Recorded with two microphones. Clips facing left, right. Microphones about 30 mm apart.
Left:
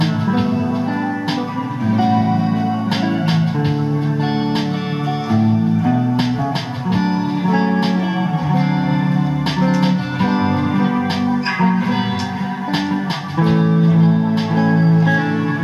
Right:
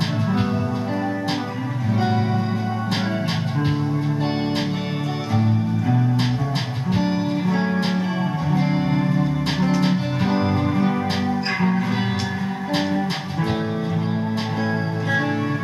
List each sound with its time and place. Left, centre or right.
6.9 s music: centre
11.2 s music: centre
13.5 s music: left